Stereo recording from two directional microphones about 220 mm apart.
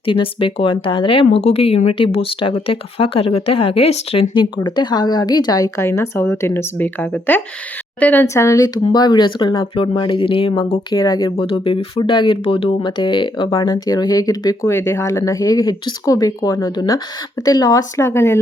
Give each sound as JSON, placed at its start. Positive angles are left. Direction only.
{"t": 0.0, "sound": "speech", "side_deg": 25}
{"t": 10.9, "sound": "speech", "side_deg": 20}